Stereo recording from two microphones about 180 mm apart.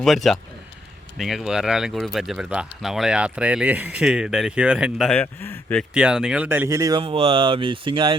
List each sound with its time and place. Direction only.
0.0 s speech: centre (ahead or behind)
5.9 s speech: 5° right (ahead or behind); by 8.2 s 30° right (ahead or behind)